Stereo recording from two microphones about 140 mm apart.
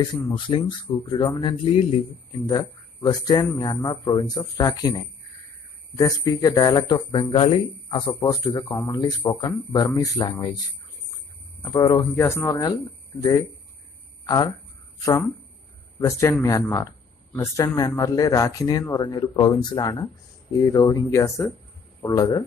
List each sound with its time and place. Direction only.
0.0 s speech: 35° left (ahead or behind)
2.3 s speech: 30° left (ahead or behind)
11.6 s speech: 30° left (ahead or behind)
12.2 s speech: 20° left (ahead or behind)
14.2 s speech: 30° left (ahead or behind)
16.0 s a man's voice: 25° left (ahead or behind)